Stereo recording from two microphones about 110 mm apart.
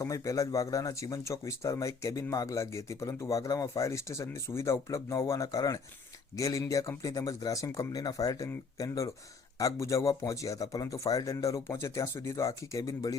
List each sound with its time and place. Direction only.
0.0 s speech: 30° left (ahead or behind)